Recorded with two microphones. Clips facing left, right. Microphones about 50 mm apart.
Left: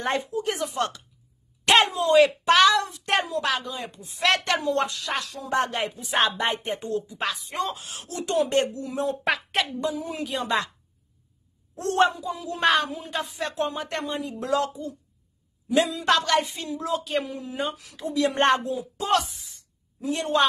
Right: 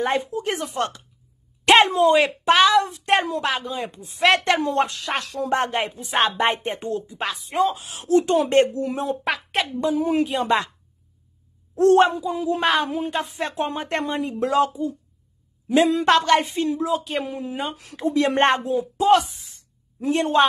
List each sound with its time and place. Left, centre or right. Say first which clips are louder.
0.2 s a woman's voice: right 1 dB; right
2.1 s a woman's voice: even; right
7.5 s speech: right 8 dB; centre
8.1 s a woman's voice: right 6 dB; right
9.2 s a woman's voice: right 1 dB; centre
9.8 s a woman's voice: right 8 dB; right
11.7 s a woman's voice: right 7 dB; right
14.7 s speech: right 8 dB; centre
15.9 s a woman's voice: right 5 dB; right
16.8 s speech: right 3 dB; centre
17.2 s a woman's voice: right 2 dB; right
18.9 s speech: right 7 dB; centre
19.5 s a sound: right 1 dB; right